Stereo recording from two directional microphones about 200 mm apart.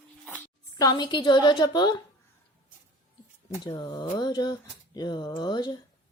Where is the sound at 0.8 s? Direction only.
20° left (ahead or behind).